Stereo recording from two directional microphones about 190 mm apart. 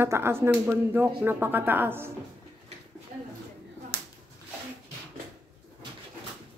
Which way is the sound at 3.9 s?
60° right (ahead or behind).